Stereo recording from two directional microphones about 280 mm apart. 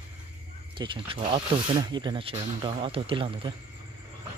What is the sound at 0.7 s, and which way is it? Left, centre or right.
Speech, centre.